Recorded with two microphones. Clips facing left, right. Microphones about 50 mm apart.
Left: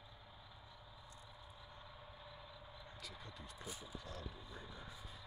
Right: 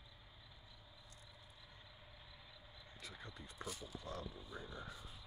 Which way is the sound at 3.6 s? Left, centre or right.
Centre.